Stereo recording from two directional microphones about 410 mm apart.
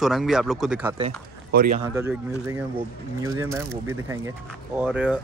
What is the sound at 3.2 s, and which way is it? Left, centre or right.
Speech, centre.